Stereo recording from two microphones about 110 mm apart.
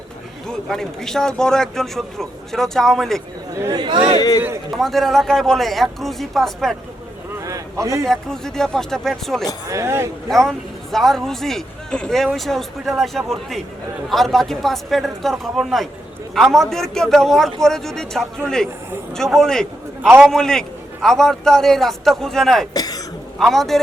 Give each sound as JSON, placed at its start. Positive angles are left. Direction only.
{"t": 0.4, "sound": "speech", "side_deg": 5}
{"t": 3.5, "sound": "speech", "side_deg": -30}
{"t": 3.8, "sound": "speech", "side_deg": -45}
{"t": 4.8, "sound": "speech", "side_deg": 0}
{"t": 7.3, "sound": "a sound", "side_deg": -30}
{"t": 8.0, "sound": "speech", "side_deg": 5}
{"t": 9.6, "sound": "speech", "side_deg": -25}
{"t": 10.2, "sound": "speech", "side_deg": 5}
{"t": 22.7, "sound": "throat clearing", "side_deg": 35}
{"t": 23.4, "sound": "speech", "side_deg": 0}